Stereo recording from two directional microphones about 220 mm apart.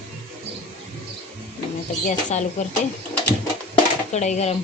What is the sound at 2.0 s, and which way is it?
Speech, 35° left (ahead or behind).